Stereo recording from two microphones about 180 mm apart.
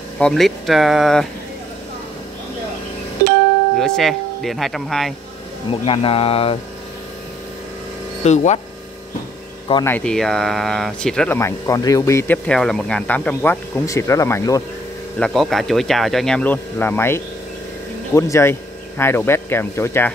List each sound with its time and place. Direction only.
0.2 s speech: centre (ahead or behind)
3.8 s speech: centre (ahead or behind)
5.7 s speech: 30° left (ahead or behind)
8.2 s speech: 40° left (ahead or behind)
9.8 s speech: 5° left (ahead or behind)
11.3 s speech: 15° left (ahead or behind)
15.1 s speech: 5° left (ahead or behind)